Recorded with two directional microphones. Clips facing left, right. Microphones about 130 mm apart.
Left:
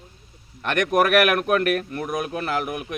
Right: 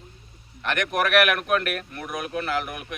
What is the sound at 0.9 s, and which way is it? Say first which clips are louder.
Speech: left 3 dB; 45° left (ahead or behind).